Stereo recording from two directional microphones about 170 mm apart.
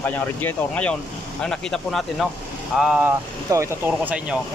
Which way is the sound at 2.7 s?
5° right (ahead or behind).